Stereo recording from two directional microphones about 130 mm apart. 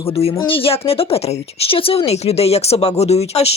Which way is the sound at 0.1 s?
50° left (ahead or behind).